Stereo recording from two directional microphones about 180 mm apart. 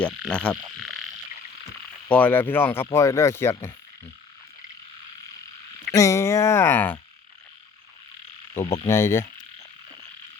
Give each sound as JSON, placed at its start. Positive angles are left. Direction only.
{"t": 0.3, "sound": "frog", "side_deg": 5}
{"t": 2.0, "sound": "speech", "side_deg": 10}
{"t": 5.9, "sound": "speech", "side_deg": 15}
{"t": 8.6, "sound": "hum", "side_deg": 30}
{"t": 8.9, "sound": "speech", "side_deg": 15}